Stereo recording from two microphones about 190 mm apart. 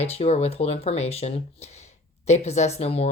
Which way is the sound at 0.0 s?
35° left (ahead or behind).